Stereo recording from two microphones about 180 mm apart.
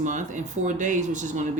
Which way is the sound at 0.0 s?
45° right (ahead or behind).